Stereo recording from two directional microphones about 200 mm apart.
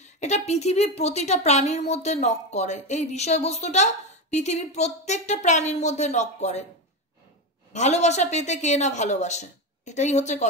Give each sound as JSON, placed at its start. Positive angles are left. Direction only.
{"t": 0.0, "sound": "a woman's voice", "side_deg": 35}
{"t": 7.7, "sound": "a woman's voice", "side_deg": 35}